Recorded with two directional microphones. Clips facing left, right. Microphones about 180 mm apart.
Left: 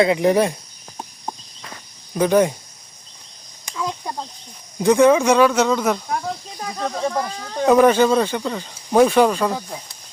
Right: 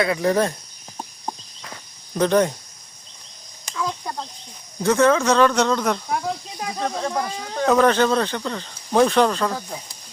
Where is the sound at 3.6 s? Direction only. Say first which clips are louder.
Left 1 dB; 15° left (ahead or behind).